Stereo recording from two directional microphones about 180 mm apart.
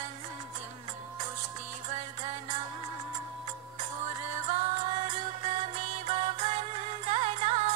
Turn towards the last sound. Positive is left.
turn(degrees=-35)  # may be behind; listen again after turning